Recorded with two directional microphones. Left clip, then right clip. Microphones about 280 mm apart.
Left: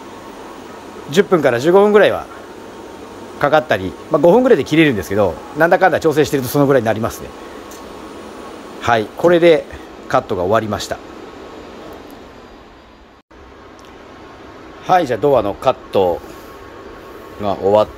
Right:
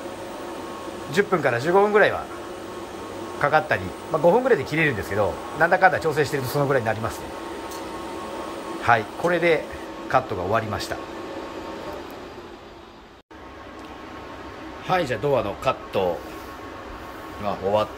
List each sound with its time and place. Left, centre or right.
1.1 s speech: left
3.3 s speech: left
8.8 s speech: left
14.9 s speech: centre